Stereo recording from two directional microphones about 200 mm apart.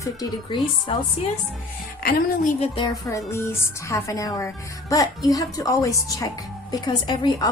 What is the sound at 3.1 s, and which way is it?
Speech, 15° left (ahead or behind).